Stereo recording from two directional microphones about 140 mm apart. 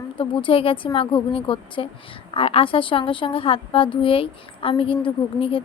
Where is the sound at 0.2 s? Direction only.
40° left (ahead or behind).